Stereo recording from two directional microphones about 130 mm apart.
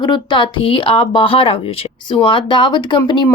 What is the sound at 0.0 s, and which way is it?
Speech, 35° left (ahead or behind).